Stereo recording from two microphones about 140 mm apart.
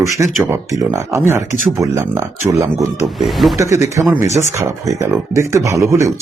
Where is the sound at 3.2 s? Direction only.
Centre (ahead or behind).